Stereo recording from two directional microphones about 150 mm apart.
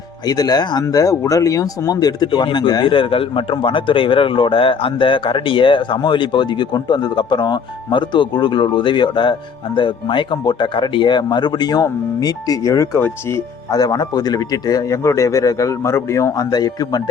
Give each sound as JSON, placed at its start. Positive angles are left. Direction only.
{"t": 0.3, "sound": "speech", "side_deg": 25}